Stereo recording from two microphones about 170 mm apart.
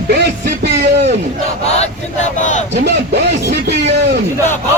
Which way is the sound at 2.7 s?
85° right.